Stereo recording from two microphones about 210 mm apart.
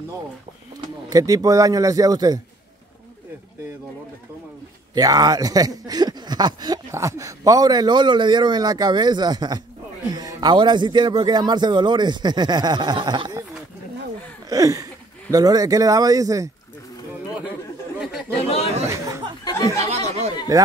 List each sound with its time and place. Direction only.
0.7 s speech: 15° right (ahead or behind)
4.9 s speech: 20° right (ahead or behind)
14.5 s a sound: 15° right (ahead or behind)
15.3 s speech: 15° right (ahead or behind)
18.3 s chatter: 30° left (ahead or behind)
18.9 s a sound: 15° right (ahead or behind)
19.4 s chatter: 15° left (ahead or behind)
20.5 s speech: 15° right (ahead or behind)